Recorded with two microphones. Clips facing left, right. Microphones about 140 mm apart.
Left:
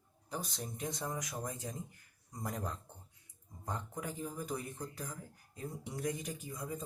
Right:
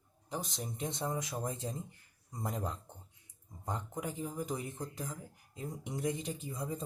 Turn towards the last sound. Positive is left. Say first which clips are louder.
# right 3 dB
turn(degrees=-30)  # may be behind; listen again after turning